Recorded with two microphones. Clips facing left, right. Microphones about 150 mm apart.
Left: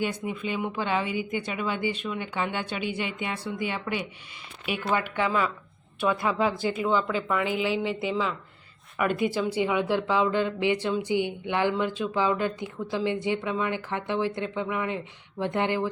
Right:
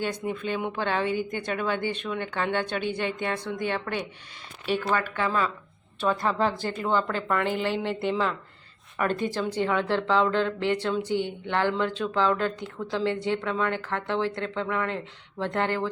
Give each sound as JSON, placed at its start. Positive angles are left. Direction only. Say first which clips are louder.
{"t": 0.0, "sound": "speech", "louder": "even", "side_deg": 10}
{"t": 6.7, "sound": "speech", "louder": "left 1 dB", "side_deg": 5}